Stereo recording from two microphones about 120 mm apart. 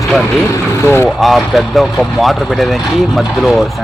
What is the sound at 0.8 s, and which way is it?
Speech, 20° left (ahead or behind).